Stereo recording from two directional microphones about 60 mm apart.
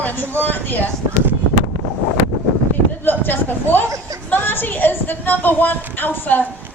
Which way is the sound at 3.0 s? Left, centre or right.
Left.